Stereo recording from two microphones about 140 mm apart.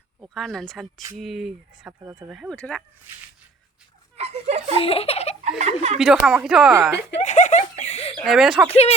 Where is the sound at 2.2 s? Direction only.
5° right (ahead or behind).